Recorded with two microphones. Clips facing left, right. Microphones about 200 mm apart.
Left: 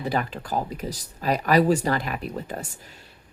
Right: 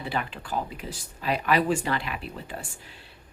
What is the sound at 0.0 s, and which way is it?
Speech, 40° left (ahead or behind).